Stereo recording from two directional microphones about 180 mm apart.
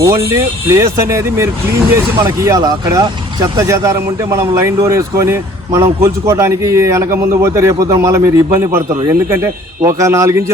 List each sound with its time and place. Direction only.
0.0 s speech: 15° right (ahead or behind)